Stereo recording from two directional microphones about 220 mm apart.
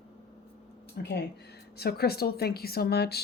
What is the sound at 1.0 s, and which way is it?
A woman's voice, 45° left (ahead or behind).